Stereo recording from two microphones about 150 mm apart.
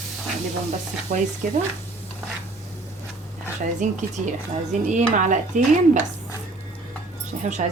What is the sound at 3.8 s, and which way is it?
Speech, 55° right (ahead or behind).